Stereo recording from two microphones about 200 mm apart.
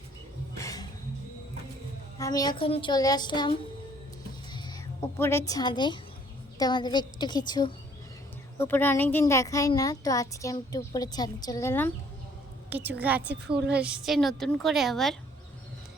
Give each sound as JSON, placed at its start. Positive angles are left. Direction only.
{"t": 0.5, "sound": "music", "side_deg": 15}
{"t": 2.1, "sound": "a woman's voice", "side_deg": 20}
{"t": 4.5, "sound": "a sound", "side_deg": 20}
{"t": 6.6, "sound": "a woman's voice", "side_deg": 20}
{"t": 8.5, "sound": "a child's voice", "side_deg": 10}
{"t": 12.7, "sound": "a woman's voice", "side_deg": -10}